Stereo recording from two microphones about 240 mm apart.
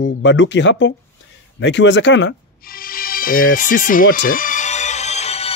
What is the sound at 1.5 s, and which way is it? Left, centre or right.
Music, left.